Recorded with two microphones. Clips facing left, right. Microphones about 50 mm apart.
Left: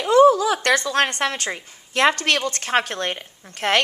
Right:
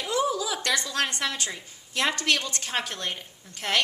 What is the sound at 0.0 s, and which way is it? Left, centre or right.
A woman's voice, left.